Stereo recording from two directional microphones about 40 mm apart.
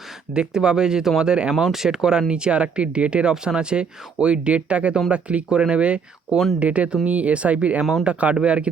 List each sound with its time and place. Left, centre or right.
0.3 s speech: centre
2.3 s speech: right